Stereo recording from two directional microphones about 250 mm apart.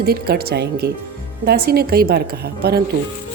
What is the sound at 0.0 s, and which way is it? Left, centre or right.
Speech, right.